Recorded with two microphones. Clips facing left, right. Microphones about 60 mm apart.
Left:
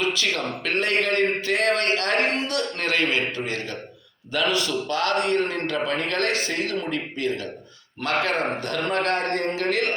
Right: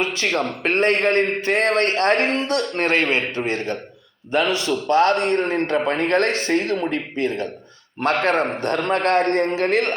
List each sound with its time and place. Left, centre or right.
0.0 s a man's voice: right